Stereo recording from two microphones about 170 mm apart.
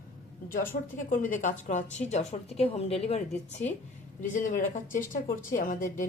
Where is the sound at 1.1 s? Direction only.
50° left (ahead or behind).